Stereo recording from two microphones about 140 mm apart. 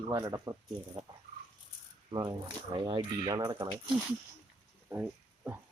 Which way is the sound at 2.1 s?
35° right (ahead or behind).